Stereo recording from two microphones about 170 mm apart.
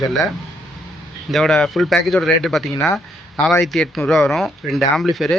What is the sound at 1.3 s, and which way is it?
Speech, centre (ahead or behind).